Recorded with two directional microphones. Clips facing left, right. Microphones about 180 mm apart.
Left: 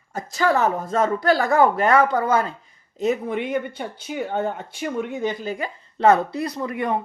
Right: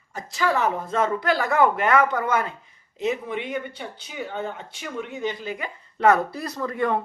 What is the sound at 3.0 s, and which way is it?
Speech, 45° left (ahead or behind).